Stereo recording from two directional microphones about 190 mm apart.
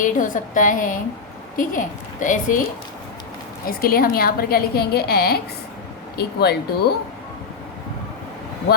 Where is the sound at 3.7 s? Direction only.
50° left (ahead or behind).